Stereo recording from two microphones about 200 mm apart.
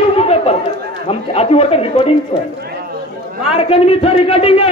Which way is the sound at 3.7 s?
30° left (ahead or behind).